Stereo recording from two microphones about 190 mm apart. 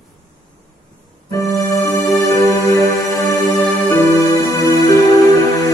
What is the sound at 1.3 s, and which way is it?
Music, 15° left (ahead or behind).